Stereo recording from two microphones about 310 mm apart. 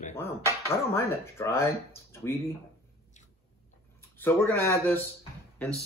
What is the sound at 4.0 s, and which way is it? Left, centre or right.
Speech, centre.